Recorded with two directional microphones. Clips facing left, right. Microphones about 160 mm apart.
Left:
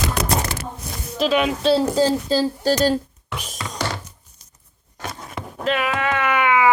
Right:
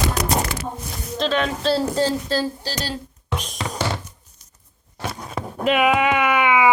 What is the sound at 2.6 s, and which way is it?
Speech, 50° left (ahead or behind).